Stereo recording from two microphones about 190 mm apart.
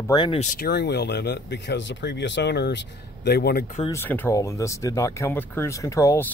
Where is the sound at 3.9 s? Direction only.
10° left (ahead or behind).